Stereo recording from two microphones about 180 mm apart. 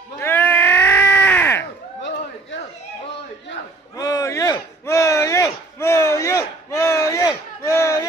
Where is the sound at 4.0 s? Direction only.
20° left (ahead or behind).